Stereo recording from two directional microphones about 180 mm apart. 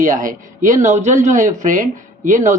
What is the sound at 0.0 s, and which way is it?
Speech, 45° right (ahead or behind).